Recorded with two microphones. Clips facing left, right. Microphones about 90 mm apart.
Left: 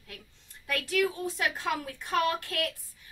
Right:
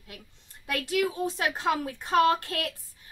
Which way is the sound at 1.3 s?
25° right (ahead or behind).